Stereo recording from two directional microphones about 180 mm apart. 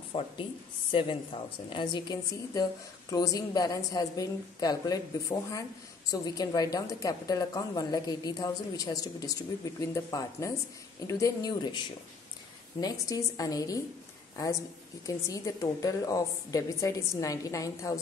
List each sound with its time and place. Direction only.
0.1 s a woman's voice: 30° left (ahead or behind)
12.8 s a woman's voice: 20° left (ahead or behind)